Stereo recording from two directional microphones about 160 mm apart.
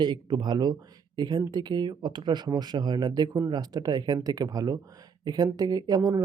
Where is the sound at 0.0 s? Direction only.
25° right (ahead or behind).